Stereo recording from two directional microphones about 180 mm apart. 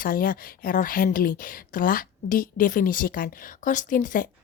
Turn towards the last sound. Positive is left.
turn(degrees=50)  # may be behind; listen again after turning